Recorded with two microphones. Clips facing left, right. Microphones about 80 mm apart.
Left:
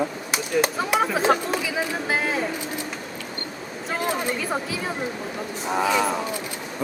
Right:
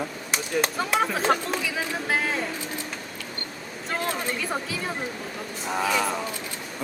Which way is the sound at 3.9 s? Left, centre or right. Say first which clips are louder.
Left 3 dB; centre.